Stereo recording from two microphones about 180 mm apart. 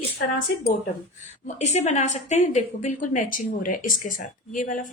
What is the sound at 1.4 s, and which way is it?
A woman's voice, 40° left (ahead or behind).